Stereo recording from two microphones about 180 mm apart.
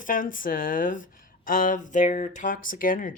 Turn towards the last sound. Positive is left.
turn(degrees=50)  # may be behind; listen again after turning